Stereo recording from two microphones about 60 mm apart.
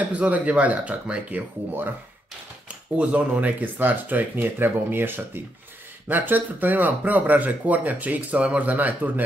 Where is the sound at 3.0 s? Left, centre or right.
Right.